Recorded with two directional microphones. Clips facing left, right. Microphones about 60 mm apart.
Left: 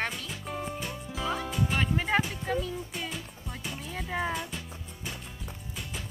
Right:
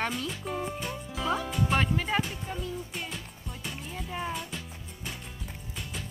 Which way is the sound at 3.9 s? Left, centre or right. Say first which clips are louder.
Left 4 dB; left.